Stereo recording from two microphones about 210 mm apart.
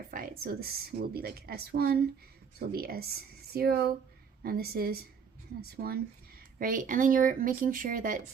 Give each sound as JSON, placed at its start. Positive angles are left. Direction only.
{"t": 0.1, "sound": "a woman's voice", "side_deg": -40}